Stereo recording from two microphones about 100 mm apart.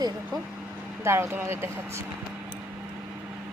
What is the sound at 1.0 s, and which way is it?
Speech, 25° right (ahead or behind).